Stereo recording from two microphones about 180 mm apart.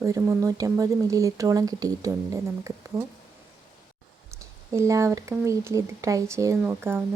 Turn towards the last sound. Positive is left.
turn(degrees=-10)  # may be behind; listen again after turning